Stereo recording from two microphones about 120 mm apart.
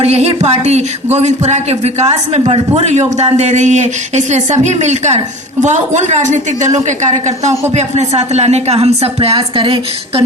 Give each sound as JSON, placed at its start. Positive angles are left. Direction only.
{"t": 0.0, "sound": "speech", "side_deg": -60}
{"t": 2.8, "sound": "speech", "side_deg": -80}
{"t": 7.7, "sound": "speech", "side_deg": -70}